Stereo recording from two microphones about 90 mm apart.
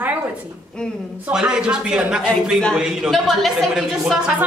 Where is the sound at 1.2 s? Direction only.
10° right (ahead or behind).